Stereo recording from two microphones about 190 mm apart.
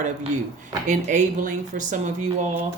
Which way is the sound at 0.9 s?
40° right (ahead or behind).